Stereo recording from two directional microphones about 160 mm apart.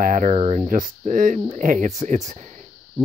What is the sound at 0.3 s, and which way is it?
Speech, 40° right (ahead or behind).